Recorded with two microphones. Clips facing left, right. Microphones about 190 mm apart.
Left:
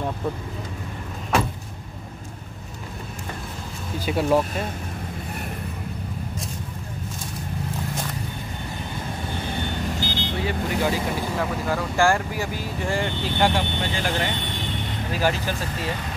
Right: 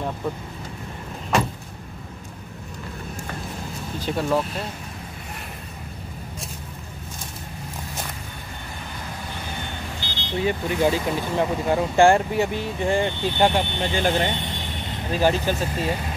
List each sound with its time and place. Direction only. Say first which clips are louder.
4.0 s speech: left 2 dB; 10° left (ahead or behind)
9.9 s vehicle: left 7 dB; 45° left (ahead or behind)
10.4 s speech: right 4 dB; 20° right (ahead or behind)